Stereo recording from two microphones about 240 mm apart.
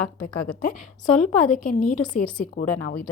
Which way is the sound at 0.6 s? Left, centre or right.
Left.